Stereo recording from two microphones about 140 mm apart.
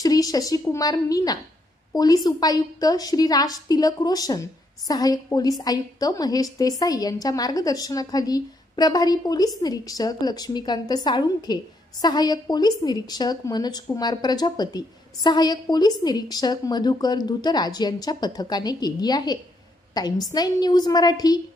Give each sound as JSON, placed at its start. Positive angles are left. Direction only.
{"t": 0.0, "sound": "a woman's voice", "side_deg": 25}